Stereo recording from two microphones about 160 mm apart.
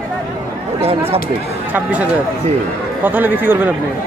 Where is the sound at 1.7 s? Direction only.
10° right (ahead or behind).